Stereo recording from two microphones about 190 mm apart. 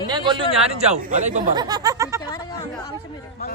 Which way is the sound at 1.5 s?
20° right (ahead or behind).